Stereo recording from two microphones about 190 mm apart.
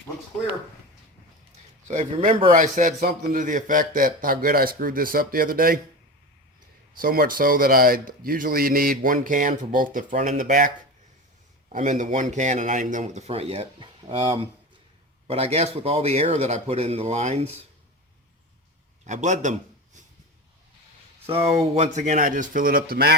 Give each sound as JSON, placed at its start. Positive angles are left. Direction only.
{"t": 1.9, "sound": "a man's voice", "side_deg": -40}
{"t": 6.9, "sound": "speech", "side_deg": -50}
{"t": 11.7, "sound": "a man's voice", "side_deg": -40}
{"t": 19.0, "sound": "a man's voice", "side_deg": -40}
{"t": 21.2, "sound": "speech", "side_deg": -30}